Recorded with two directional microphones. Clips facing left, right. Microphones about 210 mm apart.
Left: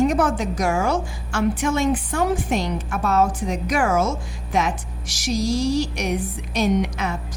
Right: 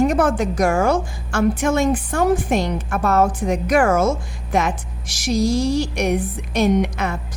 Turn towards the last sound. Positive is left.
turn(degrees=-55)  # may be behind; listen again after turning